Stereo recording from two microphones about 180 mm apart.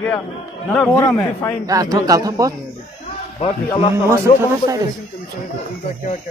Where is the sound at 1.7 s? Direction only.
20° right (ahead or behind).